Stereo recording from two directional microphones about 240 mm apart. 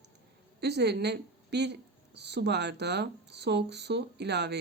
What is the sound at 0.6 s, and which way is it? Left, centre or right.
A woman's voice, right.